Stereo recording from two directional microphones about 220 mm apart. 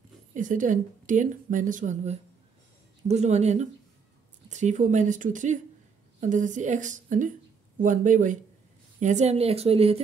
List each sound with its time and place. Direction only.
0.3 s speech: 35° right (ahead or behind)